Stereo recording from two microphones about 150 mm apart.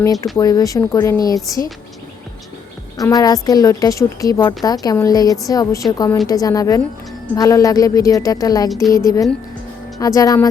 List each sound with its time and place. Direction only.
0.0 s a woman's voice: 20° left (ahead or behind)
3.0 s a woman's voice: 25° left (ahead or behind)